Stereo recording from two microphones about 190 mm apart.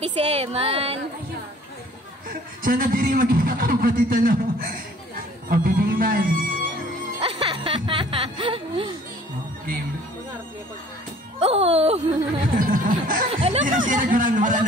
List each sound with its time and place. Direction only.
0.0 s speech: 35° right (ahead or behind)
2.2 s speech: 50° right (ahead or behind)
7.2 s music: 30° right (ahead or behind)
11.3 s speech: 35° right (ahead or behind)
12.5 s speech: 50° right (ahead or behind)
13.3 s speech: 30° right (ahead or behind)
13.7 s speech: 45° right (ahead or behind)